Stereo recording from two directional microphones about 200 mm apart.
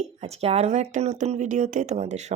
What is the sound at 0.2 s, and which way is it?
Speech, 30° right (ahead or behind).